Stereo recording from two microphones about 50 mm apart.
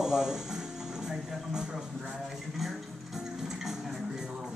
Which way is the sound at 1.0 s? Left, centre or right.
Centre.